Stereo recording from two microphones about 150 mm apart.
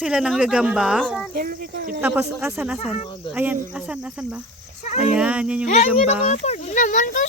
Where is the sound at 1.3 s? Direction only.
75° right (ahead or behind).